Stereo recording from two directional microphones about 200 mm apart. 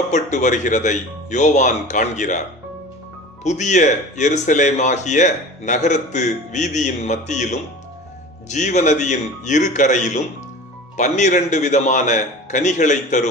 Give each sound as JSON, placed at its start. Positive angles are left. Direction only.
{"t": 0.1, "sound": "speech", "side_deg": 35}
{"t": 3.4, "sound": "speech", "side_deg": 35}